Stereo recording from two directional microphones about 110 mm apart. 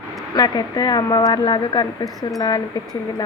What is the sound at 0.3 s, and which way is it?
A woman's voice, 35° left (ahead or behind).